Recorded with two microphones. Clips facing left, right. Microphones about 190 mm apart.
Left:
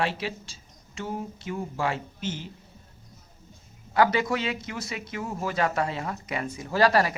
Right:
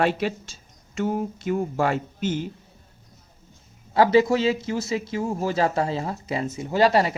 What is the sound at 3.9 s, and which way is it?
Speech, 25° right (ahead or behind).